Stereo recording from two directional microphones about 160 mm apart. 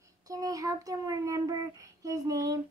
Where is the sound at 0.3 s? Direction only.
20° right (ahead or behind).